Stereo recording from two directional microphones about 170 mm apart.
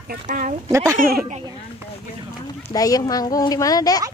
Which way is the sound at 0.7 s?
15° right (ahead or behind).